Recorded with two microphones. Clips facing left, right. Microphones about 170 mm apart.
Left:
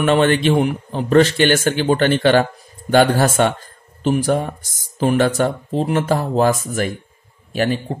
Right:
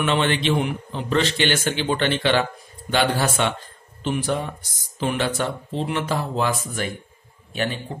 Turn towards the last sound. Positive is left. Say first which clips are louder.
# left 7 dB
turn(degrees=35)  # may be behind; listen again after turning